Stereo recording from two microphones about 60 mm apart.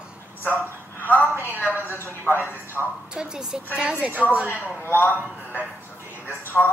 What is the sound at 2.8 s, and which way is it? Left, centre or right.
Speech, centre.